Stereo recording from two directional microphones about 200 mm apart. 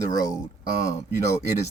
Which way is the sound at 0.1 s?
20° left (ahead or behind).